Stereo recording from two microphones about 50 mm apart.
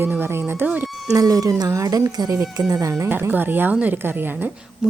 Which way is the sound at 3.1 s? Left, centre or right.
Right.